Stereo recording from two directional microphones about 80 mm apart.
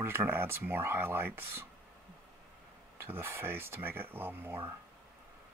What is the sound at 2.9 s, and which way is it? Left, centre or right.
Speech, right.